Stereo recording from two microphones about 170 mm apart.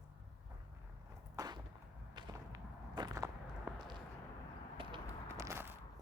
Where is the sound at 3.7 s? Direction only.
15° right (ahead or behind).